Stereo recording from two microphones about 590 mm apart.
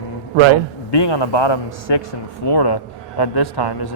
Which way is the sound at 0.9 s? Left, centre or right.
Left.